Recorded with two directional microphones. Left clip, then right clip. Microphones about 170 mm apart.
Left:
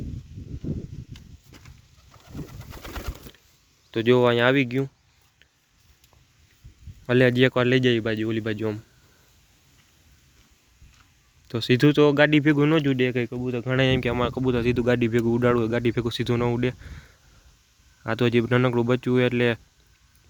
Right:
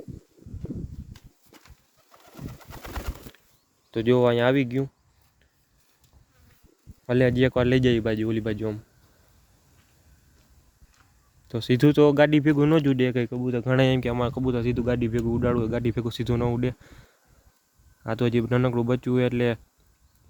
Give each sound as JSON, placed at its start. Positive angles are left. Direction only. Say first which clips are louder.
{"t": 1.1, "sound": "horse", "louder": "left 3 dB", "side_deg": 0}
{"t": 2.1, "sound": "pigeon", "louder": "left 2 dB", "side_deg": 0}
{"t": 3.9, "sound": "speech", "louder": "left 2 dB", "side_deg": -5}
{"t": 7.1, "sound": "speech", "louder": "left 2 dB", "side_deg": 0}
{"t": 8.5, "sound": "speech", "louder": "left 2 dB", "side_deg": 0}
{"t": 11.4, "sound": "speech", "louder": "left 1 dB", "side_deg": -10}
{"t": 12.8, "sound": "speech", "louder": "even", "side_deg": -30}
{"t": 13.8, "sound": "speech", "louder": "left 1 dB", "side_deg": -10}